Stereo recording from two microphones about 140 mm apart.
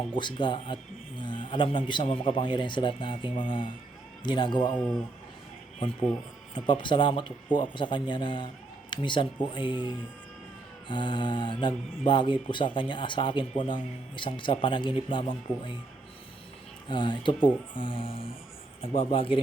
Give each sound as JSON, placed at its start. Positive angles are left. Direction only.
{"t": 0.2, "sound": "a man's voice", "side_deg": 35}
{"t": 6.5, "sound": "speech", "side_deg": 35}
{"t": 16.9, "sound": "speech", "side_deg": 35}